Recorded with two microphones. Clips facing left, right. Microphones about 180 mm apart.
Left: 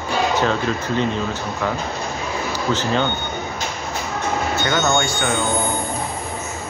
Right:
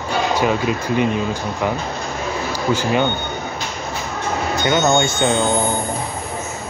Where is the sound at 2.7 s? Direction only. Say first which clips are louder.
Right 3 dB; 15° right (ahead or behind).